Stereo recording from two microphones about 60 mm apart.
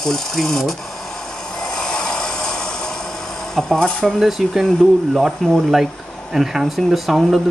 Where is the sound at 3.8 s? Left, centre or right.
Centre.